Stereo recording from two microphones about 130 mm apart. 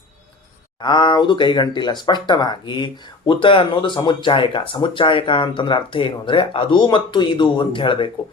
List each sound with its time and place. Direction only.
0.8 s speech: 35° left (ahead or behind)